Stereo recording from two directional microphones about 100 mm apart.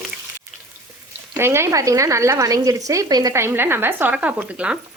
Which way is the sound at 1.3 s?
25° right (ahead or behind).